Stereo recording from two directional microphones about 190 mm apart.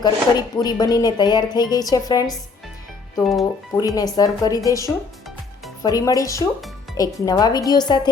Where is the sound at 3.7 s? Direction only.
20° left (ahead or behind).